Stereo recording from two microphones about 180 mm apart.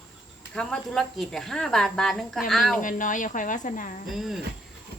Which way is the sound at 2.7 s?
45° left (ahead or behind).